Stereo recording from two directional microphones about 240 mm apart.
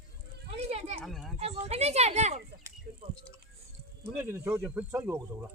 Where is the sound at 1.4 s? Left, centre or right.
Right.